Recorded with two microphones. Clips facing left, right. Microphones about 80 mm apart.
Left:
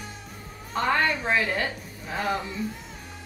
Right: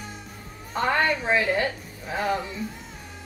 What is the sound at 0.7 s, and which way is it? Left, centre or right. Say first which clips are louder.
A woman's voice: right 1 dB; centre.